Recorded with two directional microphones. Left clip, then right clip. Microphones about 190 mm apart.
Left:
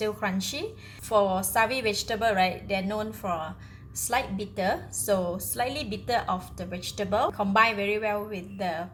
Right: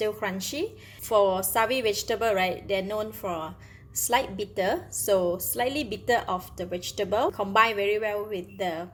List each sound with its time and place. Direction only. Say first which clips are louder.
0.0 s a woman's voice: even; 45° right (ahead or behind)